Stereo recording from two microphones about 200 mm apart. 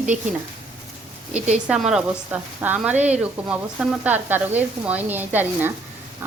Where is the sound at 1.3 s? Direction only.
35° right (ahead or behind).